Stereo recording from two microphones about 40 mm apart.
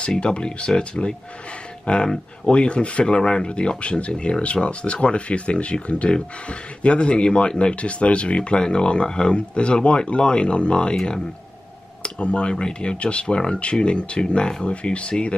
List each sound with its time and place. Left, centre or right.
0.2 s speech: left
6.0 s speech: centre
12.0 s speech: left